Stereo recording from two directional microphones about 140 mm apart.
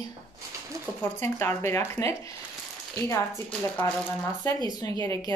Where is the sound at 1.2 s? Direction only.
20° left (ahead or behind).